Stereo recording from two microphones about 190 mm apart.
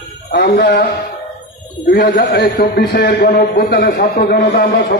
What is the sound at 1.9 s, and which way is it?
A man's voice, 55° left (ahead or behind).